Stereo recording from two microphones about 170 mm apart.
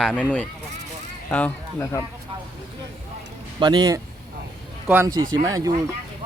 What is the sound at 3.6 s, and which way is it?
Speech, 25° right (ahead or behind).